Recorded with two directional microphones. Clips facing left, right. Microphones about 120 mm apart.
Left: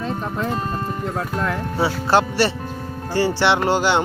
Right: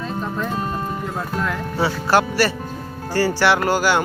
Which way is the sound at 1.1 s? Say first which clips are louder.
Left 1 dB; centre (ahead or behind).